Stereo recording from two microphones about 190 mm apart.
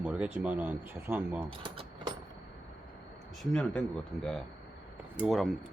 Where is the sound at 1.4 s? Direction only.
25° right (ahead or behind).